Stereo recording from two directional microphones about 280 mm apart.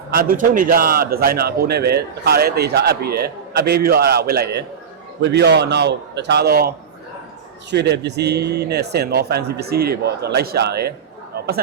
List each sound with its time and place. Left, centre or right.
0.1 s a man's voice: right
11.3 s chatter: right